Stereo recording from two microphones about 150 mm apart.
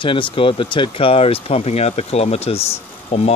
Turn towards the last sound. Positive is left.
turn(degrees=45)  # may be behind; listen again after turning